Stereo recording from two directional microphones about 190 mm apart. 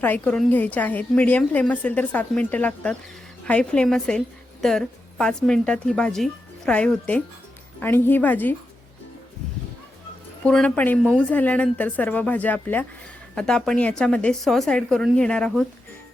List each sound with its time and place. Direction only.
0.0 s a woman's voice: 10° left (ahead or behind)
10.4 s a woman's voice: 5° left (ahead or behind)